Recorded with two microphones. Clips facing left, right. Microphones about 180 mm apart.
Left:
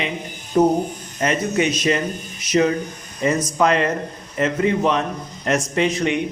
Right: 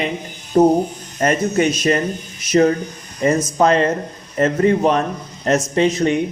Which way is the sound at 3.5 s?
35° right (ahead or behind).